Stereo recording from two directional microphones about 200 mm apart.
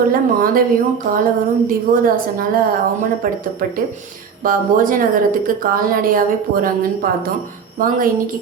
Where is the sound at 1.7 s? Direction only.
45° right (ahead or behind).